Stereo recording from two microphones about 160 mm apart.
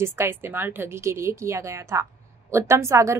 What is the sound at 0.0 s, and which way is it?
A woman's voice, 15° right (ahead or behind).